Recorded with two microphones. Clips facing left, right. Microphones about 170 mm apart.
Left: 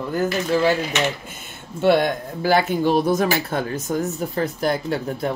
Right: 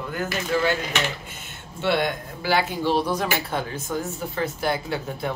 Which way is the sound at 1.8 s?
50° left (ahead or behind).